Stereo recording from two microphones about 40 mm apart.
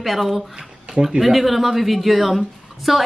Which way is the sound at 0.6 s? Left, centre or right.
Right.